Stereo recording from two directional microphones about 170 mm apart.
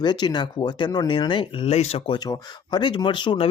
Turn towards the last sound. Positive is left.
turn(degrees=30)  # may be behind; listen again after turning